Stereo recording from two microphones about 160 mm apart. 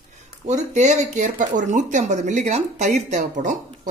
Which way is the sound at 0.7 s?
45° right (ahead or behind).